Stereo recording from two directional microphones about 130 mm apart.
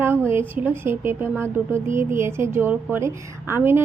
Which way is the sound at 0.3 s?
20° right (ahead or behind).